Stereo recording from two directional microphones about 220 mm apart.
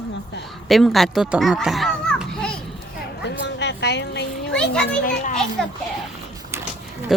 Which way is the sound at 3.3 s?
50° left (ahead or behind).